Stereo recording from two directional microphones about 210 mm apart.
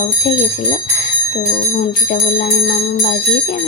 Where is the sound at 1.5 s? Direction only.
40° left (ahead or behind).